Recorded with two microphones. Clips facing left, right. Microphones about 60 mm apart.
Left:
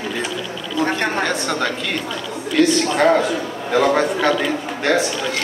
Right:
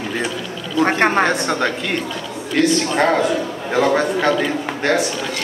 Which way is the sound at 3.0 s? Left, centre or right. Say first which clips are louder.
Left 1 dB; centre.